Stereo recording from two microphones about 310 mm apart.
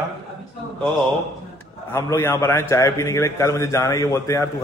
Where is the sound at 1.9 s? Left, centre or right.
Centre.